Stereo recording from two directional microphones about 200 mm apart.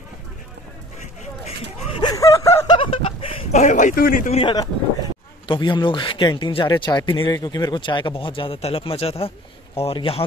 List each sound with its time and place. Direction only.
1.9 s snicker: 25° left (ahead or behind)
5.5 s speech: 25° left (ahead or behind)